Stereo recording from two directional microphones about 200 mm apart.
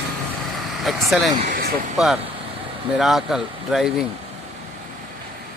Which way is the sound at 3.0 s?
Centre (ahead or behind).